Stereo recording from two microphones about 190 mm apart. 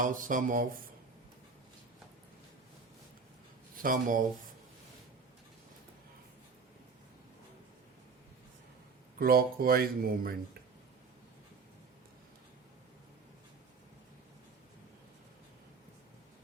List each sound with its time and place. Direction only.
0.0 s speech: 45° right (ahead or behind)
3.8 s speech: 45° right (ahead or behind)
9.1 s speech: 50° right (ahead or behind)